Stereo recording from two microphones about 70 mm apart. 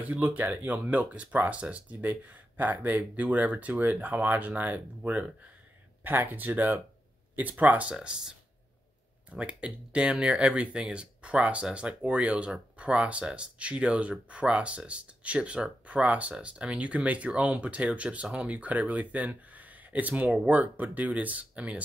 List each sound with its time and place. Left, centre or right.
0.0 s speech: right
7.9 s speech: centre